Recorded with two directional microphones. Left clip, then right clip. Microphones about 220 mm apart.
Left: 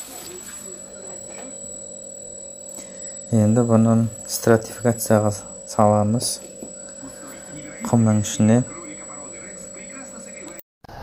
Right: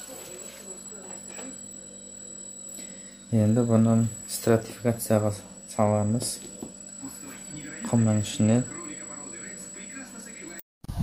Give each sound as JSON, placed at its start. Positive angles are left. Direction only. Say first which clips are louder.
{"t": 3.3, "sound": "speech", "louder": "left 6 dB", "side_deg": 15}
{"t": 7.8, "sound": "speech", "louder": "left 6 dB", "side_deg": 20}